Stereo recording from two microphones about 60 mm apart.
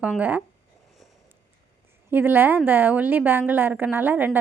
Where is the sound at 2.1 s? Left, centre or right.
Right.